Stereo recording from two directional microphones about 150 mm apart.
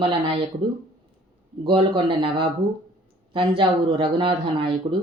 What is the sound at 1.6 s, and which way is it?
Speech, 35° right (ahead or behind).